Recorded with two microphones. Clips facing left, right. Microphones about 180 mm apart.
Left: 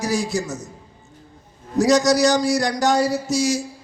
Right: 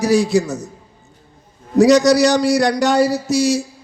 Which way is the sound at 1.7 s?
65° right (ahead or behind).